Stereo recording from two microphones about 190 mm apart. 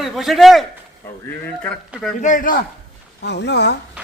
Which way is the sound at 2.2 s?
45° left (ahead or behind).